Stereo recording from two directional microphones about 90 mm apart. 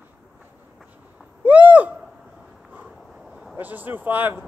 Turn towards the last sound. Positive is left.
turn(degrees=-20)  # may be behind; listen again after turning